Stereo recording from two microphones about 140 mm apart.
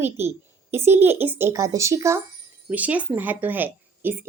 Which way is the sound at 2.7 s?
10° right (ahead or behind).